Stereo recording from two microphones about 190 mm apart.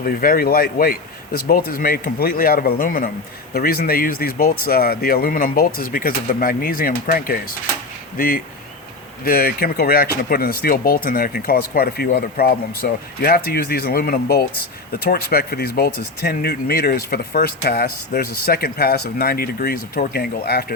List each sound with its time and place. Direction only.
0.0 s speech: 50° left (ahead or behind)
9.2 s speech: 50° left (ahead or behind)